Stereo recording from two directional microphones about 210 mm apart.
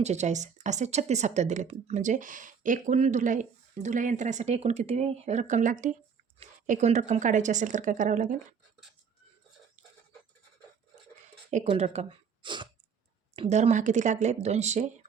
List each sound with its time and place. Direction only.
0.0 s speech: 35° right (ahead or behind)
11.5 s speech: 30° right (ahead or behind)